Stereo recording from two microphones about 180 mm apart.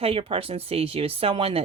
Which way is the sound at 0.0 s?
30° right (ahead or behind).